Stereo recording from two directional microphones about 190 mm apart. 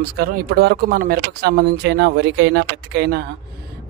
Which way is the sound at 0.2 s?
55° right (ahead or behind).